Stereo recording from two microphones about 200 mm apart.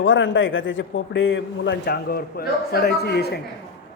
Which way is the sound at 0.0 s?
70° left (ahead or behind).